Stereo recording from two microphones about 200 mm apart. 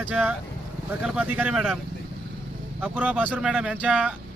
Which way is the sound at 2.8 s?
5° right (ahead or behind).